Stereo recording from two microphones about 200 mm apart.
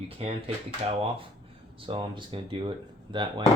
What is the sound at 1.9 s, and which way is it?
Speech, 25° right (ahead or behind).